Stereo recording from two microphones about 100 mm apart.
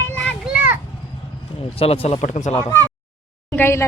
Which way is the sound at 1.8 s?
80° left.